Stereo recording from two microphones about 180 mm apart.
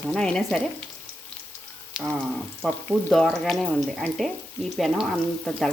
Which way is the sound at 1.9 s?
5° right (ahead or behind).